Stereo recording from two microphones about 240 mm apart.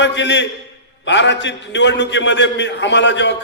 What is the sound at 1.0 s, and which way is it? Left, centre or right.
A man's voice, left.